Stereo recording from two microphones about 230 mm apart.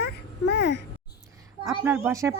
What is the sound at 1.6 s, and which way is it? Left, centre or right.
Speech, centre.